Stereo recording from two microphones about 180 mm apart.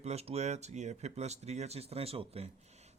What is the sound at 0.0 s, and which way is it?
A man's voice, 35° right (ahead or behind).